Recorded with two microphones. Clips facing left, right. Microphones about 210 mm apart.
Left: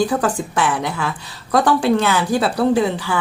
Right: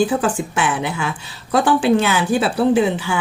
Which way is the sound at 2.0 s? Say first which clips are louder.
Even; 25° right (ahead or behind).